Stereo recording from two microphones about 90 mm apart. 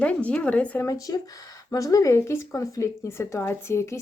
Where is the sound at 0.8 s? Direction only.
40° left (ahead or behind).